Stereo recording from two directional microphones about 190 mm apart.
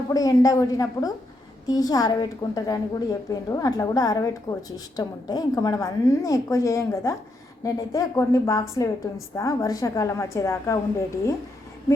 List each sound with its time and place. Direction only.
0.1 s a woman's voice: 20° left (ahead or behind)